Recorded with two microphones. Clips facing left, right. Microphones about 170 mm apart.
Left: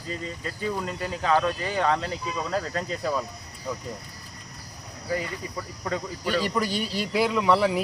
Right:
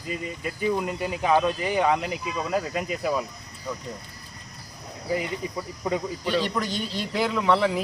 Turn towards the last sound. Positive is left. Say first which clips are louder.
# even
turn(degrees=5)  # may be behind; listen again after turning